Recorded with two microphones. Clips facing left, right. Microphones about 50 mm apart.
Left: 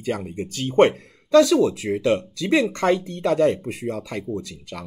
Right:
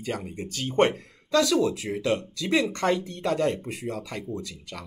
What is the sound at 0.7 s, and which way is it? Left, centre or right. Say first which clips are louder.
Speech: left 6 dB; left.